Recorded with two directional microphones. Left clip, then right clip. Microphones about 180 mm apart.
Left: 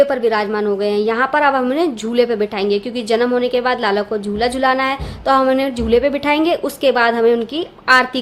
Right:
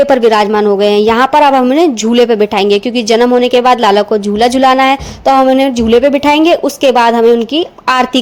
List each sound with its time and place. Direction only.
0.1 s speech: 40° right (ahead or behind)